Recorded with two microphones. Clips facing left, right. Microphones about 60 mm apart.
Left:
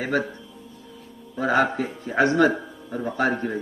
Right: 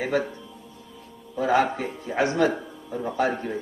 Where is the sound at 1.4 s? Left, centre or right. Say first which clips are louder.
Left 1 dB; left.